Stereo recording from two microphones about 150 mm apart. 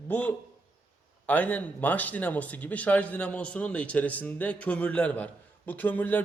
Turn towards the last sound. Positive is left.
turn(degrees=10)  # may be behind; listen again after turning